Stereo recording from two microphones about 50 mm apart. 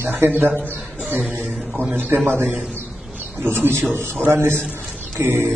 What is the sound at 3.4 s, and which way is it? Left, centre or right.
A man's voice, right.